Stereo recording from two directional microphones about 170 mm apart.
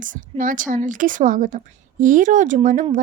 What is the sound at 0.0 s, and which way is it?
A woman's voice, 50° right (ahead or behind).